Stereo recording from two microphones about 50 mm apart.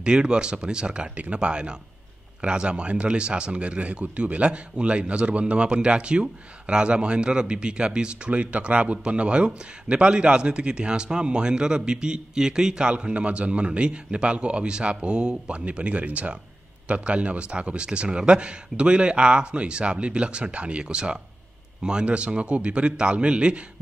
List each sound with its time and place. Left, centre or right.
0.0 s a man's voice: centre